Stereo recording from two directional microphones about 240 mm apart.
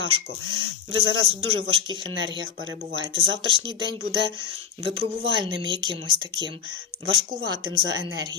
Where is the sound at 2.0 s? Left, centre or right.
Right.